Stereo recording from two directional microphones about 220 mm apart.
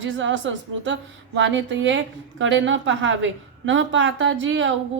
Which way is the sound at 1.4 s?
55° right (ahead or behind).